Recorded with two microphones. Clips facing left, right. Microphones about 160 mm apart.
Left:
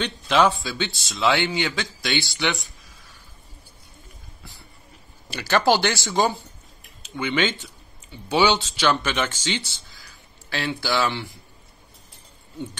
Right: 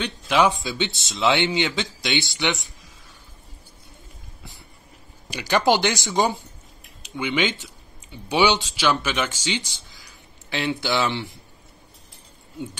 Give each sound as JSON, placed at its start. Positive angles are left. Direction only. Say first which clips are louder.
{"t": 0.0, "sound": "speech", "louder": "even", "side_deg": -10}
{"t": 5.3, "sound": "speech", "louder": "even", "side_deg": -15}